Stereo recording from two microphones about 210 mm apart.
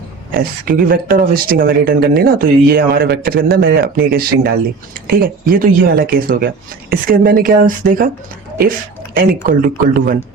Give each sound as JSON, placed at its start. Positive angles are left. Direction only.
{"t": 0.3, "sound": "speech", "side_deg": -40}
{"t": 9.6, "sound": "speech", "side_deg": -40}